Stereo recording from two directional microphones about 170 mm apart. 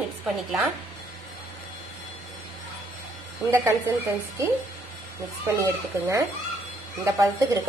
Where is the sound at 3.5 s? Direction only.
15° right (ahead or behind).